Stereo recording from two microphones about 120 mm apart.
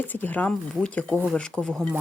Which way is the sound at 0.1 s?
15° left (ahead or behind).